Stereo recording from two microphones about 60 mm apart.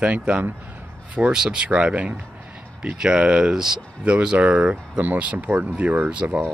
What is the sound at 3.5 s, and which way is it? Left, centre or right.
Speech, centre.